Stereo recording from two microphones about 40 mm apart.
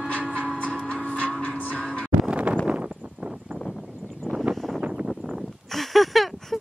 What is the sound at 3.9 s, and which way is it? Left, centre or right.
Vehicle, centre.